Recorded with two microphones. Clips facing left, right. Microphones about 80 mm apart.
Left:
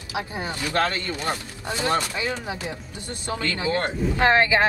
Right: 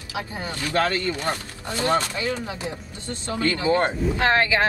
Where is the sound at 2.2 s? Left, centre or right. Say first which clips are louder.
Right 1 dB; left.